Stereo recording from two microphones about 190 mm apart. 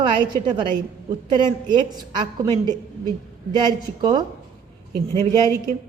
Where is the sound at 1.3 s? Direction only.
25° right (ahead or behind).